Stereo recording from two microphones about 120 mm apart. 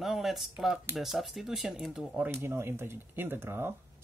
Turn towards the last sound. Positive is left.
turn(degrees=-20)  # may be behind; listen again after turning